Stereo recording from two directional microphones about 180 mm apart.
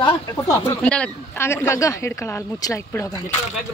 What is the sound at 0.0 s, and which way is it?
Speech, 20° left (ahead or behind).